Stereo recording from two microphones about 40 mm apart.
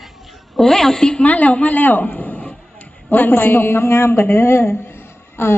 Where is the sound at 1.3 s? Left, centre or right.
Left.